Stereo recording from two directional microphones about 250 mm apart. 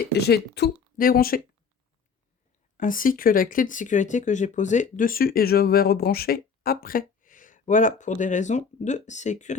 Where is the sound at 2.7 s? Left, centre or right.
Left.